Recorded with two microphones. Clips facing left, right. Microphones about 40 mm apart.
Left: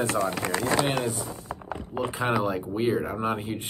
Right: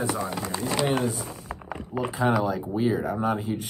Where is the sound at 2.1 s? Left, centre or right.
Left.